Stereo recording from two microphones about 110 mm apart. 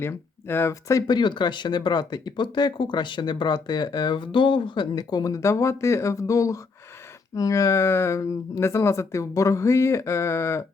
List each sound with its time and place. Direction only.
0.0 s speech: 20° left (ahead or behind)
1.1 s speech: 45° left (ahead or behind); by 10.6 s 25° left (ahead or behind)